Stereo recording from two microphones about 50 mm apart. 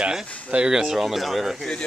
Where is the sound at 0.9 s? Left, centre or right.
Centre.